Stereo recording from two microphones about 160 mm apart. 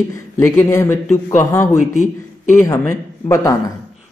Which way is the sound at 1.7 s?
50° left (ahead or behind).